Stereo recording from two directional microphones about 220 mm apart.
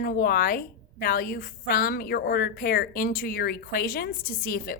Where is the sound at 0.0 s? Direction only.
45° left (ahead or behind).